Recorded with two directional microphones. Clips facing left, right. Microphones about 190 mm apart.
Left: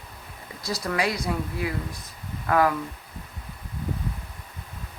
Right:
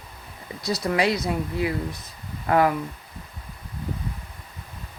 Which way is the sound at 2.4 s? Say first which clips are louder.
Right 2 dB; 25° right (ahead or behind).